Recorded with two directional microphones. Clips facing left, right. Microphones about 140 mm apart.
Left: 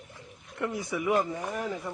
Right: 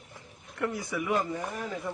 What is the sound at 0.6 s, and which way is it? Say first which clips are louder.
Speech: left 1 dB; 20° left (ahead or behind).